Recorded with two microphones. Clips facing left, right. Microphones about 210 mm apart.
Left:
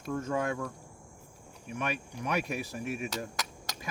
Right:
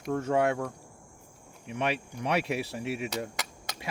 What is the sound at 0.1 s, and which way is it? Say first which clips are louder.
Cricket: right 5 dB; 70° right (ahead or behind).